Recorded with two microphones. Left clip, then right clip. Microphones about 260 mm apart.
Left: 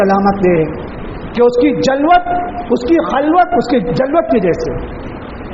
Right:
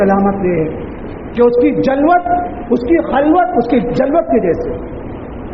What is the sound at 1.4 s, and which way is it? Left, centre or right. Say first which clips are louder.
A man's voice: even; left.